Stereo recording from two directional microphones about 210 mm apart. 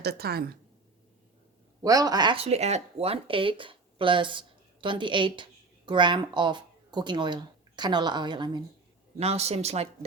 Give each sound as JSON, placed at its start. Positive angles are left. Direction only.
{"t": 0.0, "sound": "a woman's voice", "side_deg": -50}
{"t": 1.8, "sound": "a woman's voice", "side_deg": -15}